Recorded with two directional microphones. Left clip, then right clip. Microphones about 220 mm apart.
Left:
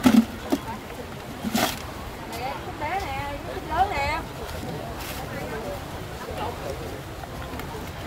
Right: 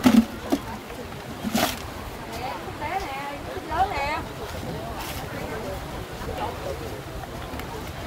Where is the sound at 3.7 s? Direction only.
40° left (ahead or behind).